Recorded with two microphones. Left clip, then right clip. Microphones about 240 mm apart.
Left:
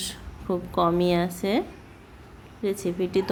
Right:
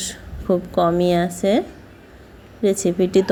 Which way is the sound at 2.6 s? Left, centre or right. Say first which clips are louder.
Right 8 dB; centre.